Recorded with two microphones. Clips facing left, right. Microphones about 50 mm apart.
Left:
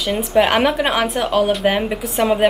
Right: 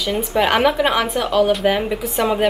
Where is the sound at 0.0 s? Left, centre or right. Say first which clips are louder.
Left 2 dB; centre.